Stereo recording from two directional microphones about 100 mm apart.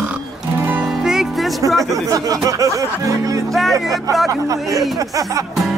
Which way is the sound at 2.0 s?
35° right (ahead or behind).